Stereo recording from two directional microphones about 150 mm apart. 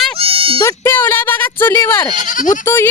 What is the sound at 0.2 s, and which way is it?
Sheep, 40° right (ahead or behind).